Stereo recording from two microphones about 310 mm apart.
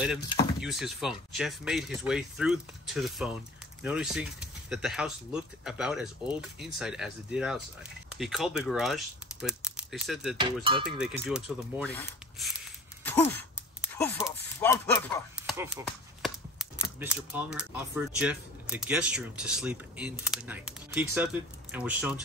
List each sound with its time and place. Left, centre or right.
0.6 s speech: centre
10.4 s music: centre
11.0 s speech: centre
13.0 s a sound: centre
14.2 s speech: centre
15.3 s a sound: centre
17.0 s speech: centre